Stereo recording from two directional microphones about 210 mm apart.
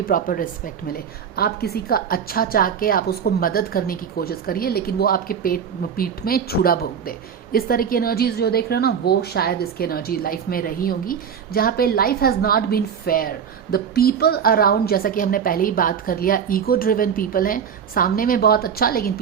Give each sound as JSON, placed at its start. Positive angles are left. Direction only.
{"t": 0.0, "sound": "a woman's voice", "side_deg": 40}